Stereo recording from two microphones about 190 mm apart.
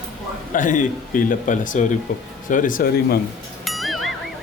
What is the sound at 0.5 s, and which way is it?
Speech, 45° left (ahead or behind).